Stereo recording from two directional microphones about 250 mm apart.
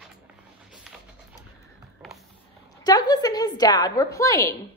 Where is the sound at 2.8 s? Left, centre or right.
Centre.